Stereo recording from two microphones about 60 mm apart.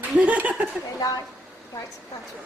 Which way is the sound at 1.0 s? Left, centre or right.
Left.